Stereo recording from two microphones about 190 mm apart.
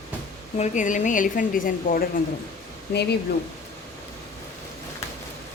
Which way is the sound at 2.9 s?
60° left (ahead or behind).